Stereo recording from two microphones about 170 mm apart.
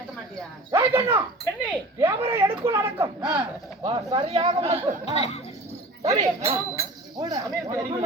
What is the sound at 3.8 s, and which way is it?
Speech, 35° right (ahead or behind).